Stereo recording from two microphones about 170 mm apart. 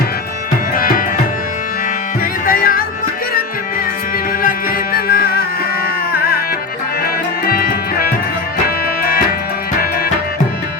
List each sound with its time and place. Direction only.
0.8 s music: 55° left (ahead or behind)
2.5 s music: 55° left (ahead or behind)
4.4 s music: 60° left (ahead or behind)